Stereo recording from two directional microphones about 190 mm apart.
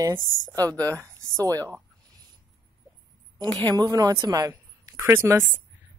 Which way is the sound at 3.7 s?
20° right (ahead or behind).